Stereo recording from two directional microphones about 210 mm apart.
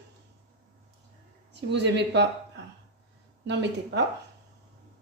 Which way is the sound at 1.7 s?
55° right (ahead or behind).